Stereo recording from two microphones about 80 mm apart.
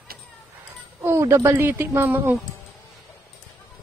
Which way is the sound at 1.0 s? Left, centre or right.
Right.